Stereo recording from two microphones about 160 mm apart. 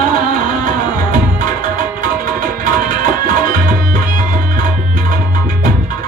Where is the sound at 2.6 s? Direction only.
55° right (ahead or behind).